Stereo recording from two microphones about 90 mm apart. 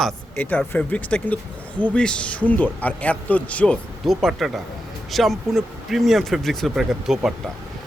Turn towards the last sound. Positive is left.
turn(degrees=-5)  # may be behind; listen again after turning